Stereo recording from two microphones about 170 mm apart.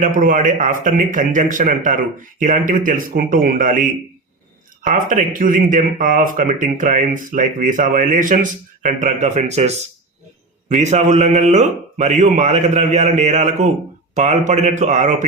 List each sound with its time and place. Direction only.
0.0 s a man's voice: 50° right (ahead or behind)